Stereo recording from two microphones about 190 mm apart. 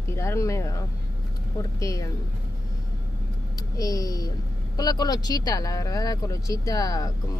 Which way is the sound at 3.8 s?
20° left (ahead or behind).